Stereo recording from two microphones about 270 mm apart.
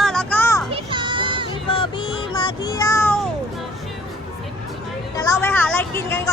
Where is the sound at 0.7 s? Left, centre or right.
Centre.